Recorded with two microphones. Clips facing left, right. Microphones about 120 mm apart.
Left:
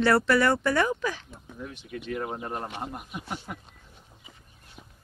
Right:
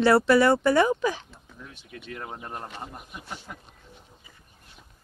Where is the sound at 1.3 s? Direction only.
15° left (ahead or behind).